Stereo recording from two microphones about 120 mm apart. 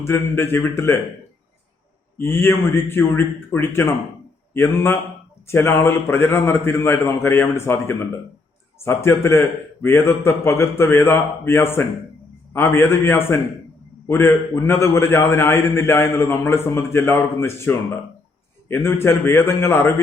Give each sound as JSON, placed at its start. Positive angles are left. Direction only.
{"t": 0.0, "sound": "a man's voice", "side_deg": 20}
{"t": 2.1, "sound": "a man's voice", "side_deg": 20}